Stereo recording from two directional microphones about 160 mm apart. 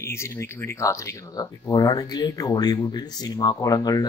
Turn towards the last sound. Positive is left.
turn(degrees=25)  # may be behind; listen again after turning